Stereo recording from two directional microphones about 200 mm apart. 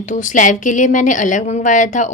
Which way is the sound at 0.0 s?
40° left (ahead or behind).